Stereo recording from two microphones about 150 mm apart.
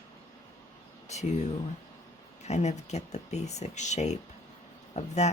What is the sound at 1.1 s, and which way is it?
Speech, 50° left (ahead or behind).